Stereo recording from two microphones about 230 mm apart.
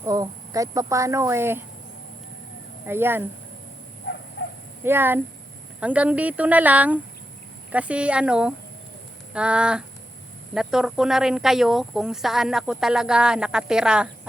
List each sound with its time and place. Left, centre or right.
0.0 s speech: centre
2.8 s speech: centre
4.0 s a sound: left
4.8 s speech: centre